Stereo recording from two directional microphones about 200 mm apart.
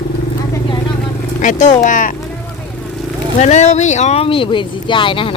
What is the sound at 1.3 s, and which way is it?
Speech, 40° left (ahead or behind).